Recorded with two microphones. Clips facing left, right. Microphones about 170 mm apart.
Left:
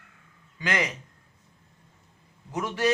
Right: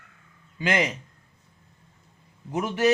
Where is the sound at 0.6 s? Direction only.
25° right (ahead or behind).